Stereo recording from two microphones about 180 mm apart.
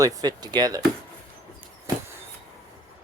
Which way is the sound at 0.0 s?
20° right (ahead or behind).